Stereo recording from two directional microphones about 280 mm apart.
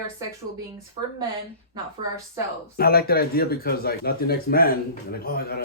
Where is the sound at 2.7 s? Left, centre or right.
Left.